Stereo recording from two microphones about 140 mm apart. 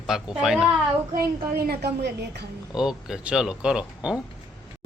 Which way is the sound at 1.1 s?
90° right.